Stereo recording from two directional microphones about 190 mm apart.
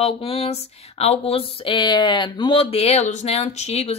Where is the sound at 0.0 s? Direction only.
30° left (ahead or behind).